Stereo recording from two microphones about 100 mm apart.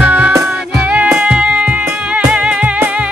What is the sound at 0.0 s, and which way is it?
Music, 10° right (ahead or behind).